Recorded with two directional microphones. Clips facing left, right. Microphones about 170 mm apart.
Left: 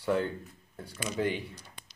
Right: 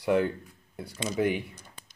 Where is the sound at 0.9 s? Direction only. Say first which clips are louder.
Right 4 dB; 25° right (ahead or behind).